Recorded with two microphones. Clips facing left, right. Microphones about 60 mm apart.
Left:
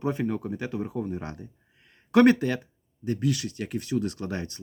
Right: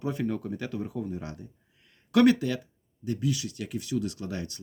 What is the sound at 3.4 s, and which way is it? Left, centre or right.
Speech, left.